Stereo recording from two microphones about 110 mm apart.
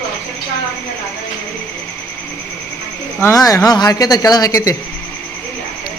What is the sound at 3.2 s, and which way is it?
Speech, 30° left (ahead or behind).